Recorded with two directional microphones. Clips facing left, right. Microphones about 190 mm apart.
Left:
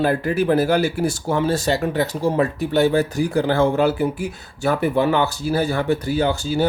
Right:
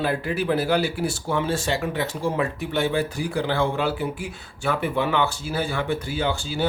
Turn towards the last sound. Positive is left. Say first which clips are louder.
# left 6 dB
turn(degrees=40)  # may be behind; listen again after turning